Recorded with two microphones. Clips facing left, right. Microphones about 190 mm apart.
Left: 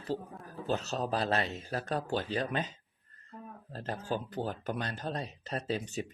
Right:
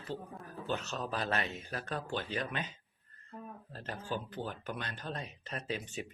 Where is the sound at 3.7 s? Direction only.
40° left (ahead or behind).